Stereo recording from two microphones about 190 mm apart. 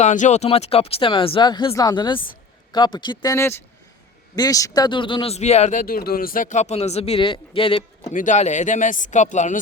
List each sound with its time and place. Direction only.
0.0 s speech: 40° left (ahead or behind)
5.8 s a man's voice: 50° left (ahead or behind); by 8.1 s 30° left (ahead or behind)
8.1 s a man's voice: 40° left (ahead or behind)